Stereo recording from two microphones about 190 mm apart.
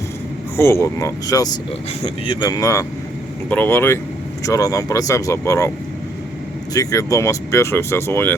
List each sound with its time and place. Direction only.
0.5 s speech: 15° left (ahead or behind)
6.7 s speech: 15° left (ahead or behind)